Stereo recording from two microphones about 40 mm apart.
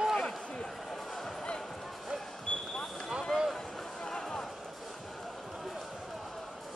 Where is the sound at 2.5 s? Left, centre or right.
Left.